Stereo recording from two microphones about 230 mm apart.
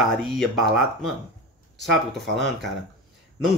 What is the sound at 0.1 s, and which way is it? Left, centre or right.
Speech, centre.